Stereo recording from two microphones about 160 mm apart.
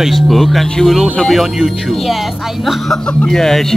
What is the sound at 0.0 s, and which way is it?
Speech, centre (ahead or behind).